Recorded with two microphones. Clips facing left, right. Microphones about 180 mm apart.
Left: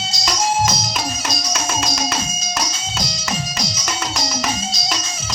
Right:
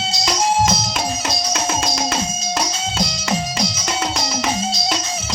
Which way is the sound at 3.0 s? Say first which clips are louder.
Right 3 dB; 55° right (ahead or behind).